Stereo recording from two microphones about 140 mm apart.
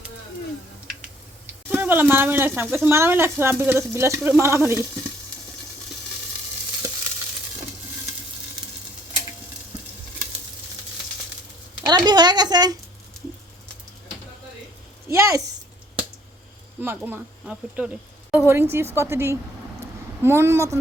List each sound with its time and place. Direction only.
1.7 s a woman's voice: 15° right (ahead or behind)
11.9 s a sound: 30° right (ahead or behind)
15.1 s a woman's voice: 20° right (ahead or behind)
16.8 s a woman's voice: 15° right (ahead or behind)